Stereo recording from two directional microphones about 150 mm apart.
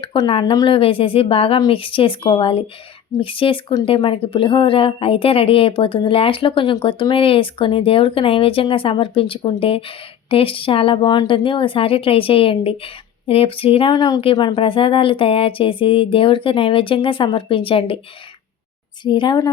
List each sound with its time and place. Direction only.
0.0 s speech: 35° left (ahead or behind)
19.0 s speech: 30° left (ahead or behind)